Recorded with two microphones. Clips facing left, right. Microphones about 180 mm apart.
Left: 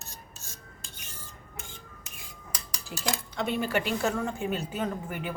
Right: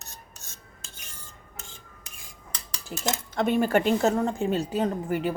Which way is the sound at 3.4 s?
45° right (ahead or behind).